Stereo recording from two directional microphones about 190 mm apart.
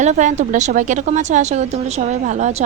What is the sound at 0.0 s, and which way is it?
Speech, 40° right (ahead or behind).